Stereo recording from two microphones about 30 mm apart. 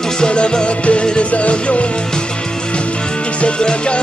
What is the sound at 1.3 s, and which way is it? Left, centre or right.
Music, left.